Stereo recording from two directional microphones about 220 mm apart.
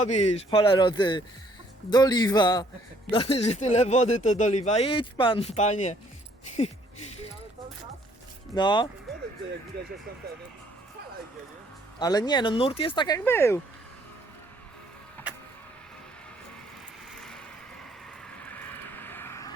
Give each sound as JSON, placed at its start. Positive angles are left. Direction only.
{"t": 0.0, "sound": "speech", "side_deg": 30}
{"t": 8.5, "sound": "speech", "side_deg": 20}
{"t": 9.7, "sound": "speech", "side_deg": -45}
{"t": 11.9, "sound": "speech", "side_deg": 20}
{"t": 13.0, "sound": "speech", "side_deg": 15}
{"t": 17.1, "sound": "vehicle", "side_deg": 0}